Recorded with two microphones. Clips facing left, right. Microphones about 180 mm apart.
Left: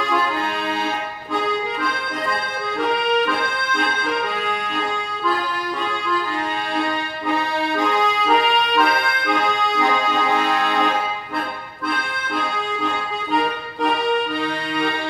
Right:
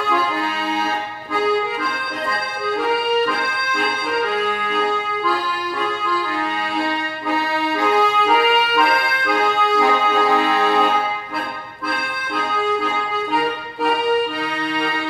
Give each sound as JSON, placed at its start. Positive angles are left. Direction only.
{"t": 2.8, "sound": "accordion", "side_deg": 0}
{"t": 6.8, "sound": "accordion", "side_deg": 0}
{"t": 12.4, "sound": "music", "side_deg": 0}